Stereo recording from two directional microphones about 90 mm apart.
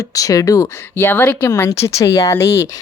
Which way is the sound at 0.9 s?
25° left (ahead or behind).